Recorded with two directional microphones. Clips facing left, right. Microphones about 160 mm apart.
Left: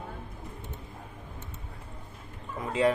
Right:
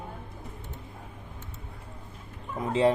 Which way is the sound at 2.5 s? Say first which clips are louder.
Right 2 dB; 30° right (ahead or behind).